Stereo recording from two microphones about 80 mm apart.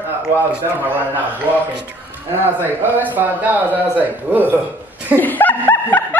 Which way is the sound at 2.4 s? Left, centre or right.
Right.